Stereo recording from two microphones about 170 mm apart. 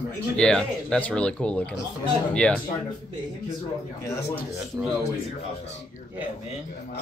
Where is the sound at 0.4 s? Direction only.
5° left (ahead or behind).